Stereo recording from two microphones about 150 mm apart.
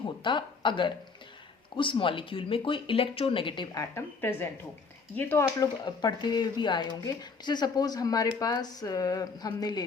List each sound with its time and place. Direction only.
0.2 s speech: 30° left (ahead or behind); by 5.5 s 15° left (ahead or behind)
5.5 s speech: 30° left (ahead or behind)